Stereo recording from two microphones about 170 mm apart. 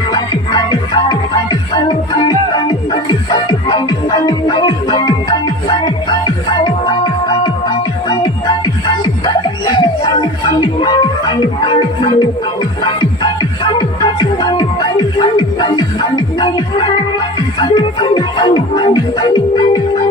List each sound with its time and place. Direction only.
0.1 s music: 25° left (ahead or behind)
2.9 s music: 25° left (ahead or behind)
8.8 s music: 25° left (ahead or behind)